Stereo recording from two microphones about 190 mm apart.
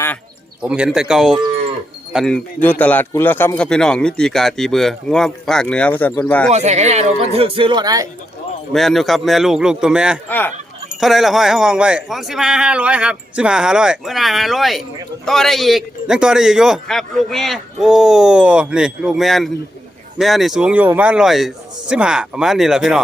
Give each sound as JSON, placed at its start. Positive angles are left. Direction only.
{"t": 0.6, "sound": "speech", "side_deg": -5}
{"t": 6.5, "sound": "speech", "side_deg": -35}
{"t": 8.7, "sound": "speech", "side_deg": 0}
{"t": 10.2, "sound": "speech", "side_deg": 10}
{"t": 11.0, "sound": "speech", "side_deg": 0}